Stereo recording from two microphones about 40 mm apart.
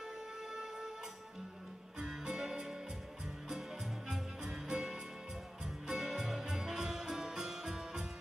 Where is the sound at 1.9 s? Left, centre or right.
Centre.